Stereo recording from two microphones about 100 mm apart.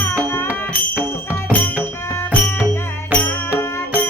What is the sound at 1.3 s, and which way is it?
Music, 15° left (ahead or behind).